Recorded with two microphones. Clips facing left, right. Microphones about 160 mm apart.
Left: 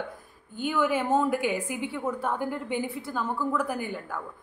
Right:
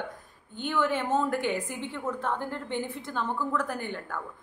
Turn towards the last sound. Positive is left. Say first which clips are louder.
# left 2 dB
turn(degrees=5)  # may be behind; listen again after turning